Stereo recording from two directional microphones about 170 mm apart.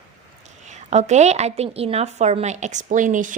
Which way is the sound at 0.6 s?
45° right (ahead or behind).